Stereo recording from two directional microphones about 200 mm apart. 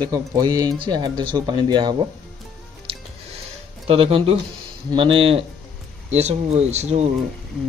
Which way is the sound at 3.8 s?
30° right (ahead or behind).